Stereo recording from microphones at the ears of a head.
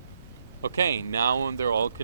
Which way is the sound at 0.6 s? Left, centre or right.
Right.